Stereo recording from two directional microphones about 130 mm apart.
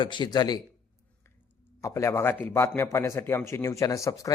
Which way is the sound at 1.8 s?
20° left (ahead or behind).